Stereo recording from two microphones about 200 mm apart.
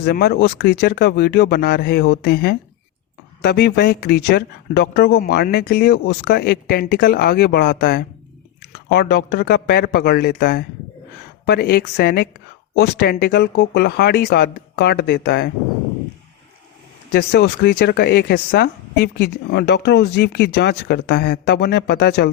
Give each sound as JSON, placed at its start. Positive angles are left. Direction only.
{"t": 0.0, "sound": "speech", "side_deg": 50}
{"t": 17.1, "sound": "speech", "side_deg": 55}